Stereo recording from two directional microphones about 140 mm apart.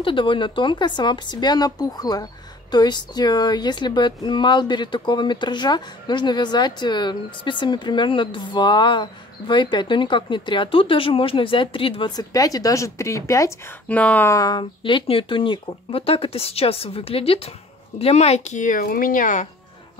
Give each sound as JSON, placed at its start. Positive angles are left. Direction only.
{"t": 0.0, "sound": "speech", "side_deg": 35}
{"t": 12.2, "sound": "speech", "side_deg": 25}
{"t": 13.8, "sound": "speech", "side_deg": 10}
{"t": 14.3, "sound": "speech", "side_deg": 25}